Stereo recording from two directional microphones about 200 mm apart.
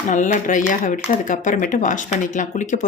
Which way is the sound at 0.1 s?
40° left (ahead or behind).